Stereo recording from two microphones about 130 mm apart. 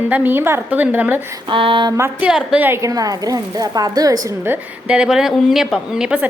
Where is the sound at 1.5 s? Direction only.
40° right (ahead or behind).